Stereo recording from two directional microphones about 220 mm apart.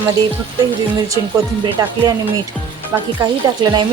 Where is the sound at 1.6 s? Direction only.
15° right (ahead or behind).